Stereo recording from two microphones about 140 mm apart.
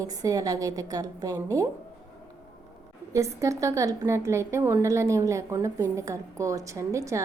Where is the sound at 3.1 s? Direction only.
20° right (ahead or behind).